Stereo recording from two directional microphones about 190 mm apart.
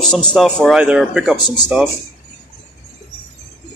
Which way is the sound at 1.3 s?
20° left (ahead or behind).